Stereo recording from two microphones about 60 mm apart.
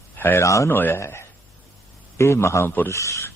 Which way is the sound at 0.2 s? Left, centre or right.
Left.